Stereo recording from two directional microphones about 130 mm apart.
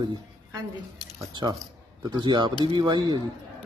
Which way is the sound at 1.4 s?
30° right (ahead or behind).